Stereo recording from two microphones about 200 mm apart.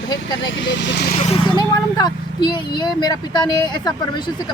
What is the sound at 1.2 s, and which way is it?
Speech, 30° left (ahead or behind).